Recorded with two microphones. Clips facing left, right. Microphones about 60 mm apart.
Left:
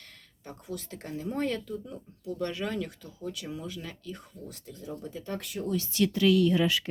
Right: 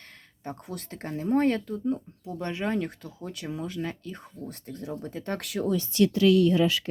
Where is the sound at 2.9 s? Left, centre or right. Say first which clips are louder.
Even; right.